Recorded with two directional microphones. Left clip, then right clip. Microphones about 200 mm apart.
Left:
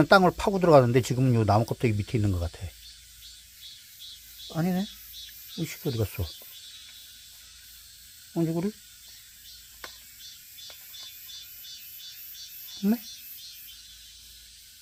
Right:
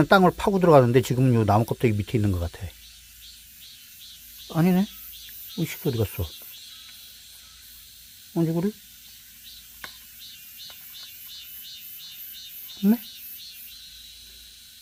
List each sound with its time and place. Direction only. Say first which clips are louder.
0.0 s speech: right 1 dB; 5° right (ahead or behind)
4.4 s speech: right 6 dB; 20° right (ahead or behind)
5.5 s cricket: right 4 dB; 20° right (ahead or behind)
8.3 s speech: right 3 dB; 5° right (ahead or behind)